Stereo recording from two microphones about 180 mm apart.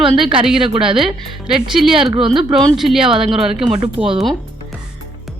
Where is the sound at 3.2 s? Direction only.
30° right (ahead or behind).